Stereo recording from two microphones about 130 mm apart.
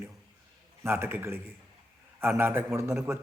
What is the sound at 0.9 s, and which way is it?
A man's voice, 15° right (ahead or behind).